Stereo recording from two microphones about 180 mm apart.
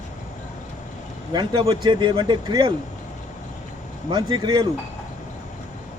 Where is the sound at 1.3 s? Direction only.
25° right (ahead or behind).